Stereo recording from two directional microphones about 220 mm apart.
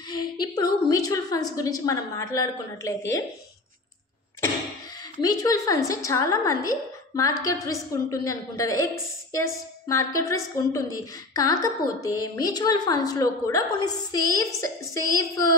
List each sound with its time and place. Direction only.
0.2 s a sound: 20° left (ahead or behind)
0.8 s a woman's voice: 15° left (ahead or behind)
5.2 s a woman's voice: 15° left (ahead or behind)